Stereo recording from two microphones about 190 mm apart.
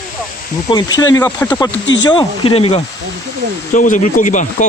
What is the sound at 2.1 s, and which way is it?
Speech, 25° left (ahead or behind).